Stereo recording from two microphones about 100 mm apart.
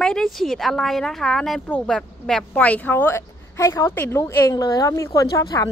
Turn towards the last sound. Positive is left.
turn(degrees=35)  # may be behind; listen again after turning